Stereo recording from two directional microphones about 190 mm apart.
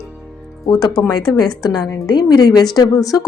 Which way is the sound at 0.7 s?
20° left (ahead or behind).